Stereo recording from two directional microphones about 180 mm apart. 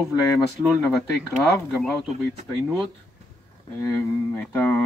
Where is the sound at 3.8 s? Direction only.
15° left (ahead or behind).